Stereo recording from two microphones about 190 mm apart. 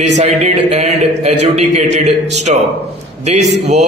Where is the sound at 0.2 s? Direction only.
35° right (ahead or behind).